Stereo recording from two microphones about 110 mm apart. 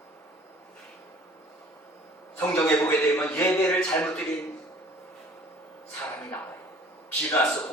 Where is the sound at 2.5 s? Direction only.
30° left (ahead or behind).